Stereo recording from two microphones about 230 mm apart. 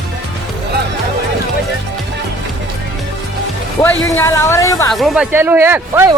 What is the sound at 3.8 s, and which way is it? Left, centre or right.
Speech, centre.